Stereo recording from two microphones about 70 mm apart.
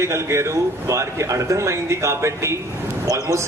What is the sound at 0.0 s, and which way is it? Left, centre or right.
A man's voice, right.